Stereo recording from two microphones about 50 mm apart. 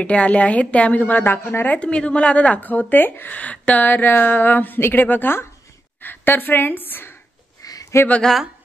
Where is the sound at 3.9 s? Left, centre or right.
Left.